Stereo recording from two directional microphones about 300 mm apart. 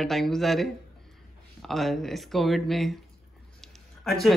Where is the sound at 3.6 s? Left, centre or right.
Centre.